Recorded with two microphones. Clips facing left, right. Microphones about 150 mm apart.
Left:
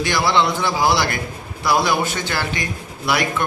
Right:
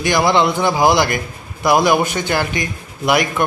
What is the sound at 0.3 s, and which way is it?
A man's voice, 15° right (ahead or behind).